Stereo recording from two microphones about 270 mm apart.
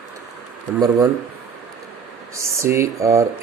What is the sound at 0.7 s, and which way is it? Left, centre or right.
Speech, centre.